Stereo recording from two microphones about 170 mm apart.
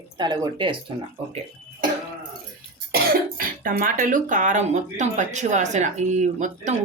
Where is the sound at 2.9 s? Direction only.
60° right (ahead or behind).